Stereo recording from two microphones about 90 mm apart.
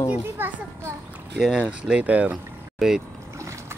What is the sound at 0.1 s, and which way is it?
Speech, 20° right (ahead or behind).